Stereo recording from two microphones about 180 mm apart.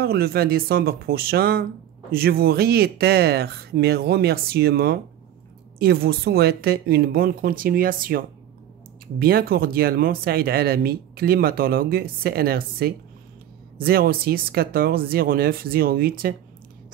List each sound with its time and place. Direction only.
0.0 s speech: 60° right (ahead or behind)